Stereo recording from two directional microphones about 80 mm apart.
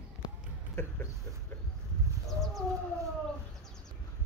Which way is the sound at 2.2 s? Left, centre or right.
Centre.